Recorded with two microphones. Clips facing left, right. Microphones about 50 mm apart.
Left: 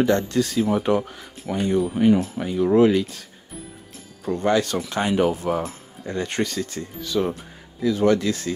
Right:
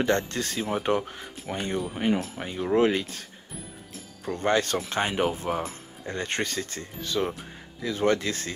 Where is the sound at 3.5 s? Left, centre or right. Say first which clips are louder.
Left 4 dB; centre.